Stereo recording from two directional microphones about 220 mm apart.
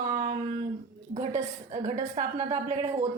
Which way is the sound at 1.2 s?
30° right (ahead or behind).